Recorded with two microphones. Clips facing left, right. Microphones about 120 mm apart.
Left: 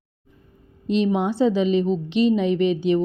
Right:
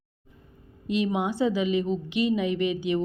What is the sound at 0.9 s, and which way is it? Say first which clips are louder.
Speech: left 5 dB; 30° left (ahead or behind).